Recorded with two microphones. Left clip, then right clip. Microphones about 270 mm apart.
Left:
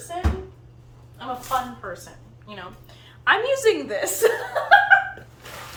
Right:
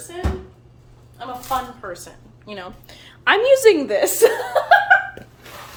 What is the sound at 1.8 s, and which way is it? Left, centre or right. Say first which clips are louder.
A woman's voice: right 2 dB; right.